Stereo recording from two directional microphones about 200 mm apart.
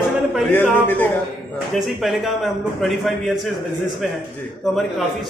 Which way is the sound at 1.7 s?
Centre (ahead or behind).